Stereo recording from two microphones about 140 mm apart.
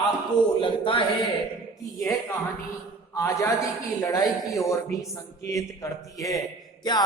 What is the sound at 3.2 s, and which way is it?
A man's voice, 20° left (ahead or behind).